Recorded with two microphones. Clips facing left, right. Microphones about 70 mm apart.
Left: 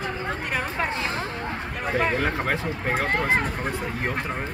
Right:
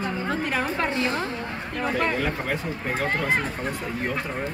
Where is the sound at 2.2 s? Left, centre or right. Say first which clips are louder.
Left 2 dB; left.